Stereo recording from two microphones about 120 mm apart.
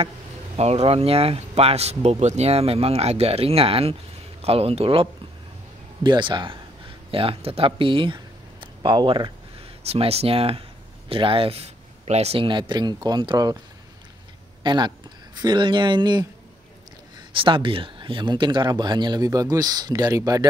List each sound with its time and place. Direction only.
0.6 s speech: 60° right (ahead or behind)
6.0 s speech: 40° right (ahead or behind)
9.8 s speech: 60° right (ahead or behind)
12.4 s speech: 40° right (ahead or behind)
14.6 s speech: 40° right (ahead or behind)
17.3 s speech: 45° right (ahead or behind)